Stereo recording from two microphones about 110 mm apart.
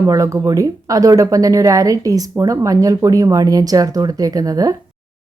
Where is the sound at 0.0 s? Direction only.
30° right (ahead or behind).